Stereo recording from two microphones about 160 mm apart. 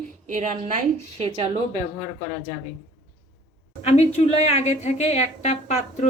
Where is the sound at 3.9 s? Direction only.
40° left (ahead or behind).